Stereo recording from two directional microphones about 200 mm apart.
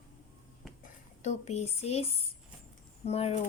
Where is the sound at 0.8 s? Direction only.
35° left (ahead or behind).